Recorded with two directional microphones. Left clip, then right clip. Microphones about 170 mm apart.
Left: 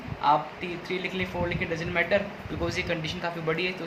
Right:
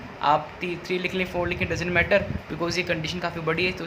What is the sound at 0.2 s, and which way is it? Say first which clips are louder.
Speech: right 1 dB; 45° right (ahead or behind).